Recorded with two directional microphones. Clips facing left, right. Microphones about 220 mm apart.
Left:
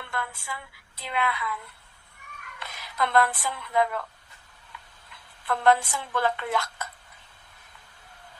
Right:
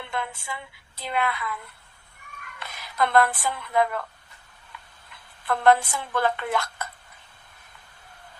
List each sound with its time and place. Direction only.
0.0 s speech: 20° right (ahead or behind)
1.0 s a woman's voice: 45° right (ahead or behind)
2.6 s speech: 50° right (ahead or behind)
4.7 s tick-tock: 55° right (ahead or behind)
5.5 s a woman's voice: 55° right (ahead or behind)